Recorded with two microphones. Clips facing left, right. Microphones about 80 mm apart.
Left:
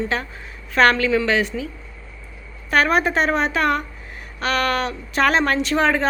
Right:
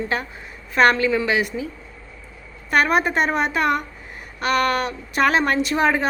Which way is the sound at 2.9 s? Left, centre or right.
Centre.